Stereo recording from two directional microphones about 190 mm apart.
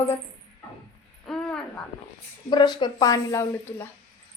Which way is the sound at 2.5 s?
25° left (ahead or behind).